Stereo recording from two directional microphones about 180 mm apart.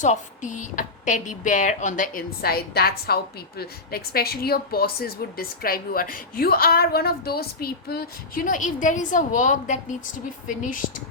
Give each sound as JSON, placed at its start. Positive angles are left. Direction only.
{"t": 0.0, "sound": "a woman's voice", "side_deg": 45}
{"t": 8.4, "sound": "speech", "side_deg": 45}